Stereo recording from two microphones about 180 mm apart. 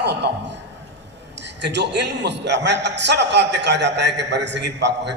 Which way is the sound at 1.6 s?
75° right (ahead or behind).